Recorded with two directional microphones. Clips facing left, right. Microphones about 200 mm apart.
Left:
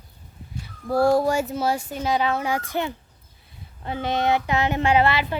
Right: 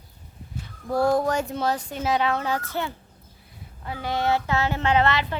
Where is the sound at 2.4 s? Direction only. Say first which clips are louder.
Left 2 dB; 15° left (ahead or behind).